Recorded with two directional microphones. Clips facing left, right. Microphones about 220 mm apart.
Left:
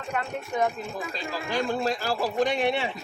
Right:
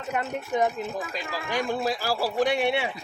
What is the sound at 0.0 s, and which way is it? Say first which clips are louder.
A man's voice: right 2 dB; 20° right (ahead or behind).